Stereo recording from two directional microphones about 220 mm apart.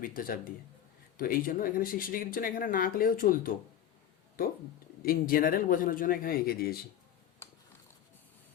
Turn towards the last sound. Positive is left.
turn(degrees=10)  # may be behind; listen again after turning